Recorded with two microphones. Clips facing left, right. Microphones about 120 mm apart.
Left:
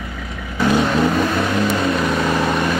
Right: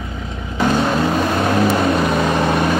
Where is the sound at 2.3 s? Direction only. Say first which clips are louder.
Right 2 dB; 5° right (ahead or behind).